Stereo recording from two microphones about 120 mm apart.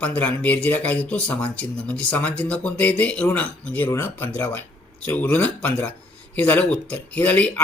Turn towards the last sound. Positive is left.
turn(degrees=10)  # may be behind; listen again after turning